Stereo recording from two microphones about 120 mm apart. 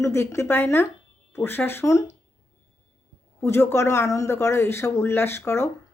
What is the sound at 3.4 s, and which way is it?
Speech, 20° left (ahead or behind).